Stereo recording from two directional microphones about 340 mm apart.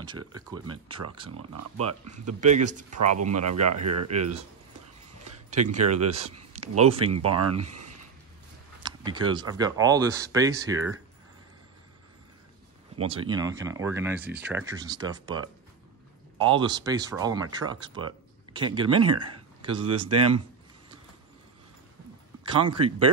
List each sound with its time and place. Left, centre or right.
0.3 s speech: centre
1.3 s speech: right
2.4 s speech: right
3.0 s speech: right
5.8 s speech: right
6.2 s a sound: centre
6.8 s speech: centre
7.2 s speech: right
8.8 s speech: centre
13.0 s speech: centre
16.4 s speech: centre
22.5 s speech: centre